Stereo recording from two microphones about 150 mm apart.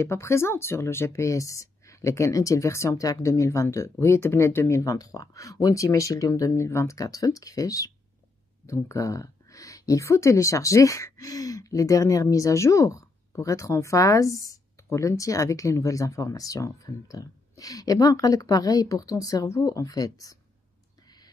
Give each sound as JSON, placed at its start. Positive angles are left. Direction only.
{"t": 0.0, "sound": "speech", "side_deg": 15}